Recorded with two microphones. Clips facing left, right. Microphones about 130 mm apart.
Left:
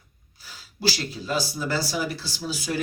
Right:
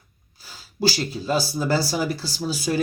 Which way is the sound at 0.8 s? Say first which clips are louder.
Right 4 dB; 30° right (ahead or behind).